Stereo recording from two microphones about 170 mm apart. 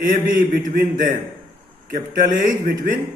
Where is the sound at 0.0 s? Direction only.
55° right (ahead or behind).